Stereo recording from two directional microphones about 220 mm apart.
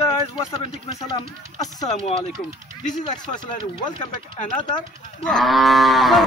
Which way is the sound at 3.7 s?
20° left (ahead or behind).